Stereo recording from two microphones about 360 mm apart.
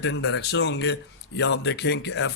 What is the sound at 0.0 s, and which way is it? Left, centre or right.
Speech, left.